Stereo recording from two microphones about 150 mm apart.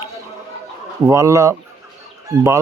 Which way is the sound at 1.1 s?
20° right (ahead or behind).